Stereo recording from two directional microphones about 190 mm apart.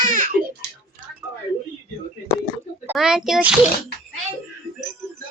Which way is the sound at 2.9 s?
5° right (ahead or behind).